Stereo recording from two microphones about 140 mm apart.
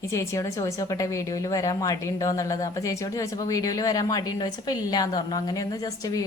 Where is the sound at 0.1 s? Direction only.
20° left (ahead or behind).